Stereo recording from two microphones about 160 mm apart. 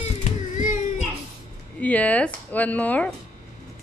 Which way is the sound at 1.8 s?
10° left (ahead or behind).